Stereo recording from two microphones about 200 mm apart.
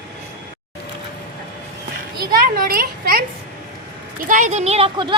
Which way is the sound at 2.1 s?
45° right (ahead or behind).